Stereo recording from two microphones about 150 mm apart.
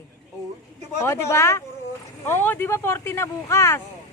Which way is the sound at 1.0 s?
15° left (ahead or behind).